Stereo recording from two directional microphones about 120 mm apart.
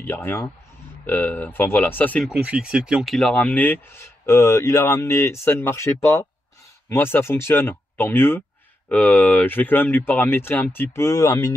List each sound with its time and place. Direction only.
0.0 s speech: 15° left (ahead or behind)
2.2 s speech: 5° right (ahead or behind)
3.3 s speech: 10° left (ahead or behind); by 11.5 s 25° left (ahead or behind)